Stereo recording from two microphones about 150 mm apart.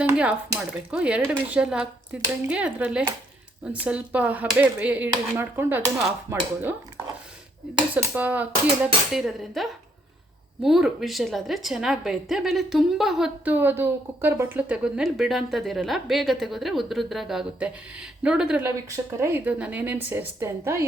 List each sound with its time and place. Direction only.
0.2 s speech: 10° right (ahead or behind)
7.9 s a woman's voice: 10° right (ahead or behind)
18.6 s speech: 15° right (ahead or behind)